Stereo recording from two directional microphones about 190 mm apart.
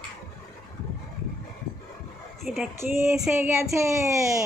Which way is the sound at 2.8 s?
15° right (ahead or behind).